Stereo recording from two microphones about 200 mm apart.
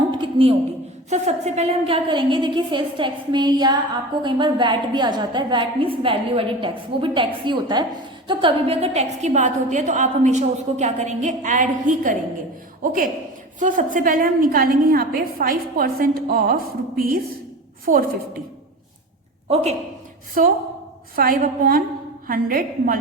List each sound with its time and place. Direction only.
0.1 s a sound: 25° right (ahead or behind)
1.1 s a woman's voice: 35° right (ahead or behind)
21.2 s a woman's voice: 45° right (ahead or behind)